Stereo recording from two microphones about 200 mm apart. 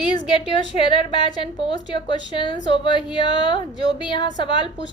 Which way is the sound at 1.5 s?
25° left (ahead or behind).